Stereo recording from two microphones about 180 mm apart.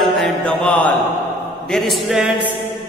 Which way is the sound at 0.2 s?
5° left (ahead or behind).